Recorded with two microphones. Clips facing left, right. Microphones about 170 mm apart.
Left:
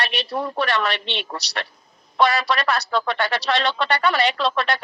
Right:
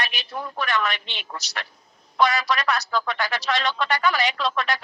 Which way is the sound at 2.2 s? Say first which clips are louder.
Left 2 dB; 30° left (ahead or behind).